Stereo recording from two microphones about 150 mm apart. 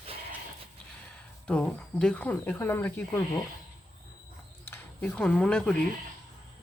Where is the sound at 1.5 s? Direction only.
5° left (ahead or behind).